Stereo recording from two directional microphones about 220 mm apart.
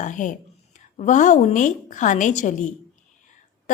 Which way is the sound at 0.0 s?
35° left (ahead or behind).